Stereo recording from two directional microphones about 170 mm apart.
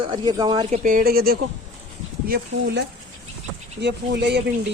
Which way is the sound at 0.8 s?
55° right (ahead or behind).